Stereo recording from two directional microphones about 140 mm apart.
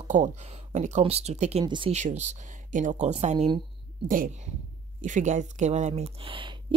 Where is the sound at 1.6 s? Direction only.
35° right (ahead or behind).